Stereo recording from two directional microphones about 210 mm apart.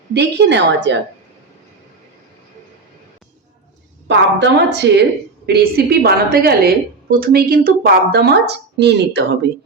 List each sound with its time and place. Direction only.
0.1 s a woman's voice: 55° right (ahead or behind)
4.1 s a woman's voice: 55° right (ahead or behind)